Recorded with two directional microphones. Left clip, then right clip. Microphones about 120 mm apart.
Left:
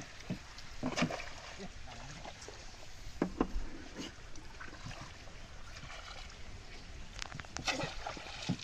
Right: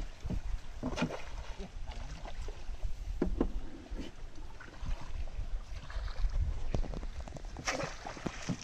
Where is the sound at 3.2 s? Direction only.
30° left (ahead or behind).